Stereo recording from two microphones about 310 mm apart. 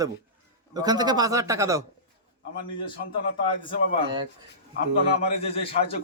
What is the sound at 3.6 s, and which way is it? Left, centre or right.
Speech, centre.